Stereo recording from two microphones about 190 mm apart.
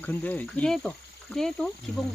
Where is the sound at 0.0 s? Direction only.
10° left (ahead or behind).